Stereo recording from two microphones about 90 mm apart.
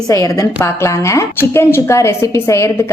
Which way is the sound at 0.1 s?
40° left (ahead or behind).